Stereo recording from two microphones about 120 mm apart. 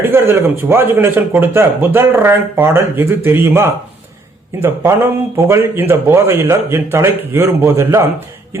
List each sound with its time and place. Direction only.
0.1 s speech: 20° right (ahead or behind)